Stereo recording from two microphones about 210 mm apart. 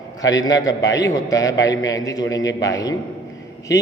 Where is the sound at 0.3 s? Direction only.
15° left (ahead or behind).